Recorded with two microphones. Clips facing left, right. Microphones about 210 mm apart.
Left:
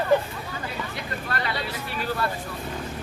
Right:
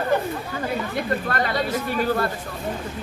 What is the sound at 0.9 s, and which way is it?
Speech, 50° right (ahead or behind).